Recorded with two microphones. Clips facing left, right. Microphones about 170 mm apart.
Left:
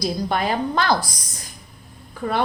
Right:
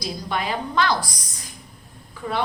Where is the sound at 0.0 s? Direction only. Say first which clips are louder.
Left 5 dB; 45° left (ahead or behind).